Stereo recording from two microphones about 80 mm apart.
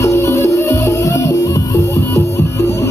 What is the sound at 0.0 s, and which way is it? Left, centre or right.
Music, left.